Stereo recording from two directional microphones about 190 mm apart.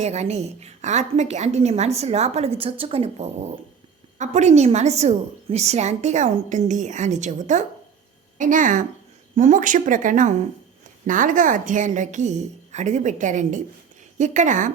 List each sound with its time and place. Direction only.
0.0 s a woman's voice: 35° right (ahead or behind)